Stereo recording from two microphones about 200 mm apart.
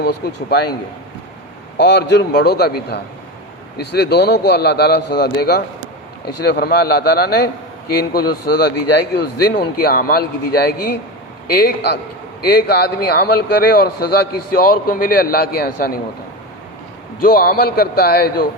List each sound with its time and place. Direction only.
0.5 s a man's voice: 55° left (ahead or behind)
1.9 s a man's voice: 60° left (ahead or behind)
17.2 s a man's voice: 50° left (ahead or behind)